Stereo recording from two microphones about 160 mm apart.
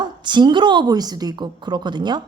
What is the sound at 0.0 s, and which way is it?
Speech, 30° right (ahead or behind).